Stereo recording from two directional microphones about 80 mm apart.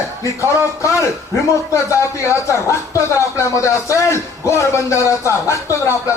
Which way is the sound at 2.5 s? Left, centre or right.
Left.